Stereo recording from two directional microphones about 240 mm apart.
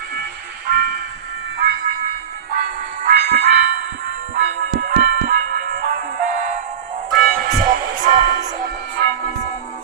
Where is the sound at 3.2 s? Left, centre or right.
Right.